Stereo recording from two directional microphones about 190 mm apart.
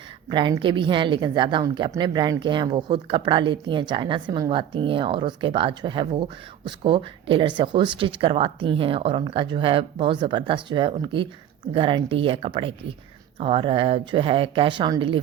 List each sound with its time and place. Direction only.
0.3 s a woman's voice: 25° right (ahead or behind)